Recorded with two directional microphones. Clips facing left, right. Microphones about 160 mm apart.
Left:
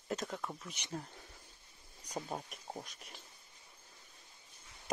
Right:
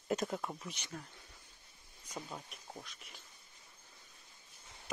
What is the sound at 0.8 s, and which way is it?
Speech, 35° left (ahead or behind).